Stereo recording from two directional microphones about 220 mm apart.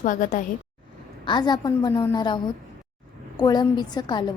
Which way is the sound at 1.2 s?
20° left (ahead or behind).